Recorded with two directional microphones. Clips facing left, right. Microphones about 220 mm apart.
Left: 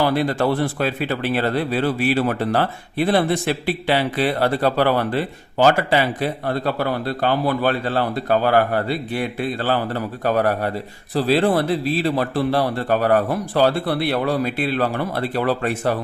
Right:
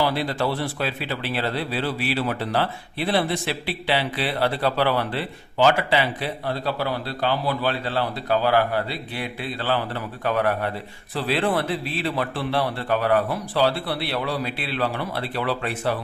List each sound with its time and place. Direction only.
0.0 s speech: 50° left (ahead or behind)